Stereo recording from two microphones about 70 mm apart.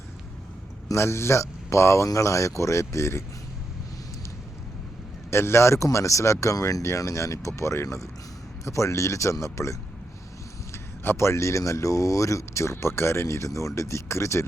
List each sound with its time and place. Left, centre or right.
0.9 s speech: left
5.3 s speech: left
10.7 s a man's voice: left